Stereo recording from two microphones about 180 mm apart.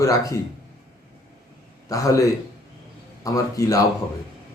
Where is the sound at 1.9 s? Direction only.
20° left (ahead or behind).